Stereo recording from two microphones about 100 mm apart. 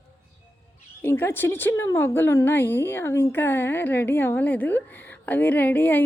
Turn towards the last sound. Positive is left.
turn(degrees=15)  # may be behind; listen again after turning